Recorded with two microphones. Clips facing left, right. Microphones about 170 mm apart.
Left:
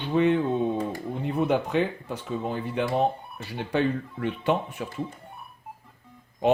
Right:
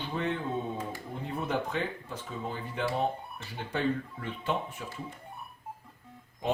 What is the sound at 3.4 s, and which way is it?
Speech, 70° left (ahead or behind).